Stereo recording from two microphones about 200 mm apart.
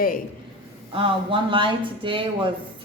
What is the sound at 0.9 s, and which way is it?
Speech, 25° right (ahead or behind).